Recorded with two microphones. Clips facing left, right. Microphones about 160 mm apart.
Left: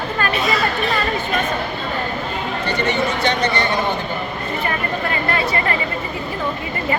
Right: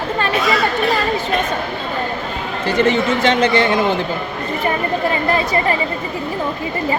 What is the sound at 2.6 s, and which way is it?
Speech, 90° right.